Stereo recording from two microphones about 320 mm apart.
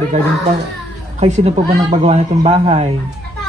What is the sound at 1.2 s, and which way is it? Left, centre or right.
Speech, right.